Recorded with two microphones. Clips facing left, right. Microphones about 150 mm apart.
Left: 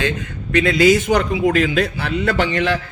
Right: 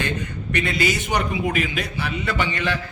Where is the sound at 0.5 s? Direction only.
90° left.